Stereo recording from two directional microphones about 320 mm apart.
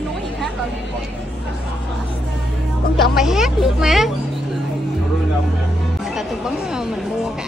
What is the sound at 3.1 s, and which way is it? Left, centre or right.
Speech, centre.